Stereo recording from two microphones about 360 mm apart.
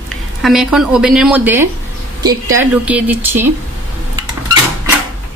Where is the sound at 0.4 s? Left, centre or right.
Centre.